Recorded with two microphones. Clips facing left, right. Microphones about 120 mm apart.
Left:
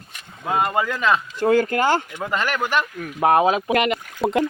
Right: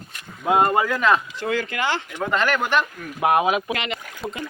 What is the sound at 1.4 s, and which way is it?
Speech, 45° left (ahead or behind).